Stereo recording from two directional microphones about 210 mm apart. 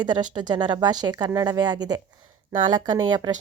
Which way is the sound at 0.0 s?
20° right (ahead or behind).